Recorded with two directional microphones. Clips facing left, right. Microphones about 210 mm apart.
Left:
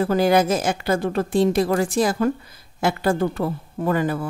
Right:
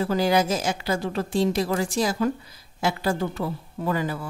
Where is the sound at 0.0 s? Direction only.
55° left (ahead or behind).